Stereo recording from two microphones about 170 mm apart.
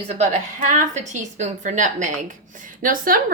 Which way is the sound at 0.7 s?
45° right (ahead or behind).